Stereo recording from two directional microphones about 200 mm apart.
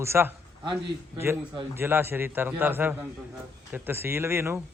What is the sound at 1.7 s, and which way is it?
A man's voice, 10° right (ahead or behind).